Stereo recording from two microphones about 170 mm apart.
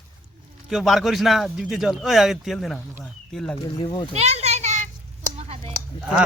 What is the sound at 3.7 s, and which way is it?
Speech, 30° left (ahead or behind).